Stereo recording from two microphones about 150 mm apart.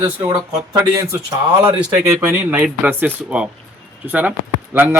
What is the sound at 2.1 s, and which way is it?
Speech, 10° right (ahead or behind).